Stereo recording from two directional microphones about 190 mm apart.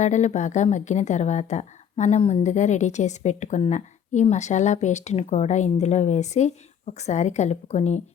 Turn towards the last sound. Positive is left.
turn(degrees=35)  # may be behind; listen again after turning